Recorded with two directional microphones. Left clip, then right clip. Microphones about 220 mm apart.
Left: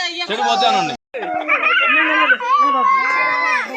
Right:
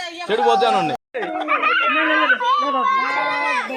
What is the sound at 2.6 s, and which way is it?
Speech, 40° left (ahead or behind).